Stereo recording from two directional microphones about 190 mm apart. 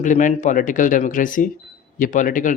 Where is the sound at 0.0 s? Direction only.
40° left (ahead or behind).